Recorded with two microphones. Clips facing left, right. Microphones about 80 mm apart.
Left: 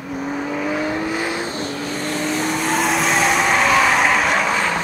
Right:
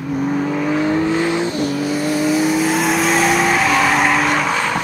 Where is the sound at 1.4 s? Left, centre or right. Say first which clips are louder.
Right 6 dB; left.